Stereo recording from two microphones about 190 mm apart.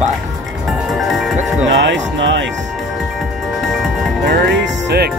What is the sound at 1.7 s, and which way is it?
Music, 75° right (ahead or behind).